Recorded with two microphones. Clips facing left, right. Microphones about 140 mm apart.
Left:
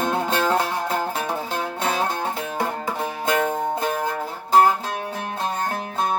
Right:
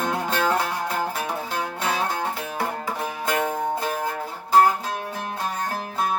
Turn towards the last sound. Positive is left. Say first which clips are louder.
# left 2 dB
turn(degrees=25)  # may be behind; listen again after turning